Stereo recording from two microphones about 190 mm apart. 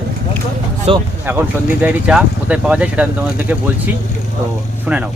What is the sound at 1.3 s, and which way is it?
Speech, 10° right (ahead or behind).